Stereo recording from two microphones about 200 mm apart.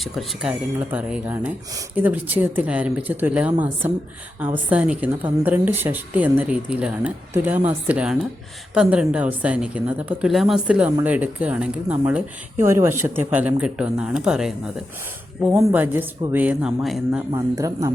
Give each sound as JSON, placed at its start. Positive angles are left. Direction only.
{"t": 0.0, "sound": "speech", "side_deg": 0}
{"t": 15.5, "sound": "speech", "side_deg": -10}
{"t": 17.3, "sound": "speech", "side_deg": -15}